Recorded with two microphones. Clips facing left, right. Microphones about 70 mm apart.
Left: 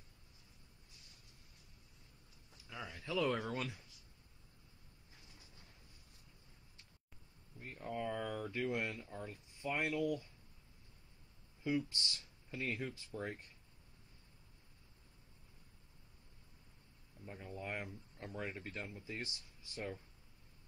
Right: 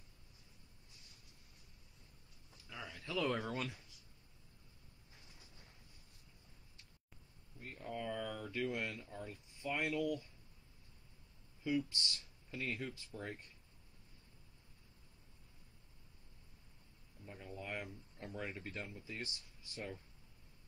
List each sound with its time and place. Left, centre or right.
2.7 s a sound: centre
3.2 s speech: centre
7.6 s speech: centre
11.6 s speech: left
17.3 s speech: left